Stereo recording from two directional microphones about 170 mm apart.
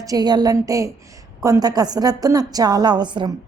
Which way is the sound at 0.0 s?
20° right (ahead or behind).